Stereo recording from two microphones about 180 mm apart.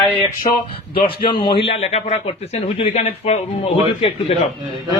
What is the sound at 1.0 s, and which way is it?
A man's voice, 25° left (ahead or behind).